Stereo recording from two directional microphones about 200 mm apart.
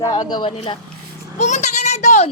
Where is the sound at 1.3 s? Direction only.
35° left (ahead or behind).